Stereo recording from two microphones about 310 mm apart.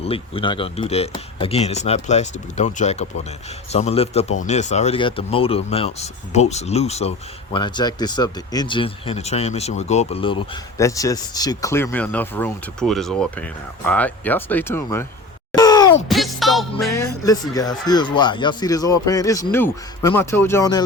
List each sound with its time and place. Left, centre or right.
0.0 s speech: centre
15.5 s a sound: centre
16.0 s speech: centre